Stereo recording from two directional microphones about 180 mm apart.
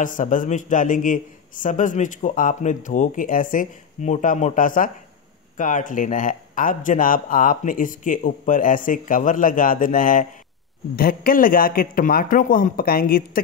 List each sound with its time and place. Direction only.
0.0 s a man's voice: 45° left (ahead or behind)